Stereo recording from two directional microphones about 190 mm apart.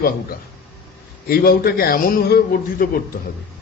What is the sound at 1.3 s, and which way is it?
Speech, 55° left (ahead or behind).